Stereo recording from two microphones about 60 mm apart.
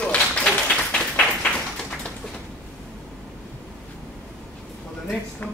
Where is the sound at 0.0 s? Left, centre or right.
Centre.